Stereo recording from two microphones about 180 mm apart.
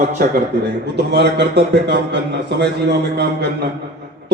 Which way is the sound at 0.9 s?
75° right (ahead or behind).